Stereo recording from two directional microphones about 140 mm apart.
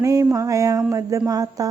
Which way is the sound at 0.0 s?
25° right (ahead or behind).